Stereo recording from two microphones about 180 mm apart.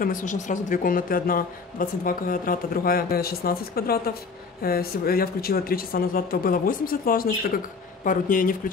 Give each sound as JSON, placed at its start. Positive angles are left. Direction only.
{"t": 0.0, "sound": "a woman's voice", "side_deg": 45}